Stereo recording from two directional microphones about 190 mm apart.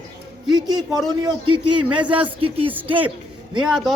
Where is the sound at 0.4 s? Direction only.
20° right (ahead or behind).